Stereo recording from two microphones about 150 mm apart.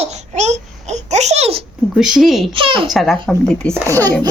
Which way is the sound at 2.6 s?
35° right (ahead or behind).